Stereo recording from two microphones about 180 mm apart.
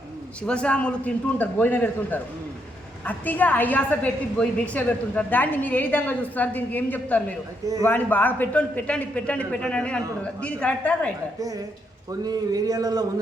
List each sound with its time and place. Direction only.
0.4 s a woman's voice: 5° left (ahead or behind)
11.3 s speech: 20° right (ahead or behind)